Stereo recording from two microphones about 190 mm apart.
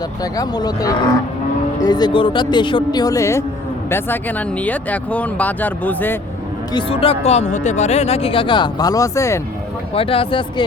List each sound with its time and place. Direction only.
0.2 s speech: 20° left (ahead or behind)
6.7 s speech: 30° left (ahead or behind)
9.9 s speech: 30° left (ahead or behind)